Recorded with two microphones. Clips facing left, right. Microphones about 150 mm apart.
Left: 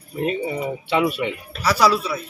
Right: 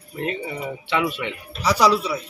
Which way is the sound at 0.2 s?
20° left (ahead or behind).